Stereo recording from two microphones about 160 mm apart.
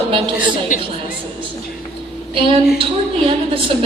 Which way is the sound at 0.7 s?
55° left (ahead or behind).